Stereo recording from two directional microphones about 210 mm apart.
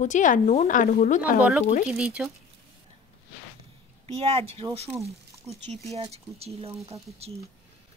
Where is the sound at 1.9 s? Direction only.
5° right (ahead or behind).